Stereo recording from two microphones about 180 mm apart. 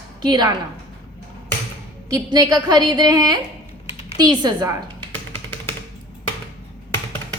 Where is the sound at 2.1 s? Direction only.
20° right (ahead or behind).